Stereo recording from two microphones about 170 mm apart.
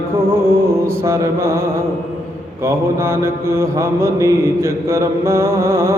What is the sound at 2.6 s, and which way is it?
Mantra, 15° right (ahead or behind).